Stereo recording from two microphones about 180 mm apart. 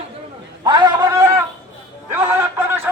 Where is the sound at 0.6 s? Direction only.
25° right (ahead or behind).